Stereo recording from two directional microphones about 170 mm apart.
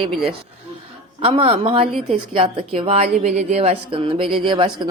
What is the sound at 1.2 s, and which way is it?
Speech, 30° right (ahead or behind).